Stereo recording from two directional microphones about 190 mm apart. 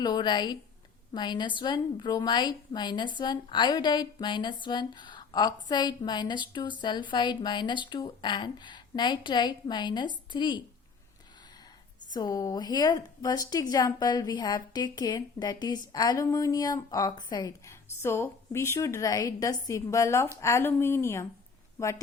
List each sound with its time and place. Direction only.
0.0 s speech: 20° left (ahead or behind)
12.1 s a woman's voice: 20° left (ahead or behind)